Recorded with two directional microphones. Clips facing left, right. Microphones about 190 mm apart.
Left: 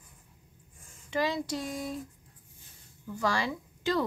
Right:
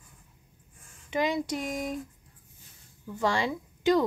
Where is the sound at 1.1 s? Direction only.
20° right (ahead or behind).